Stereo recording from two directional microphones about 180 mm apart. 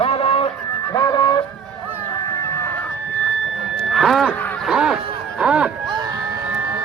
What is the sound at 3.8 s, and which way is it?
Music, centre (ahead or behind).